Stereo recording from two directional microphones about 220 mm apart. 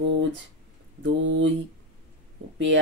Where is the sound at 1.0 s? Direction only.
60° right (ahead or behind).